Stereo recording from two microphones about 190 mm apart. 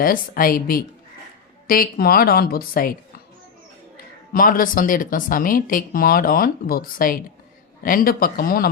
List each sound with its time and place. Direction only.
0.0 s speech: 50° left (ahead or behind)
4.3 s speech: 45° left (ahead or behind)